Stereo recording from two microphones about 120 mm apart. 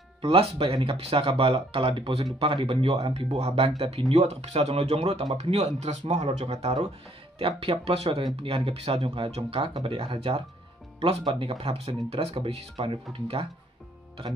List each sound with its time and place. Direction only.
0.2 s speech: 50° right (ahead or behind)
4.1 s speech: 70° right (ahead or behind)
7.3 s speech: 50° right (ahead or behind)
11.4 s speech: 55° right (ahead or behind)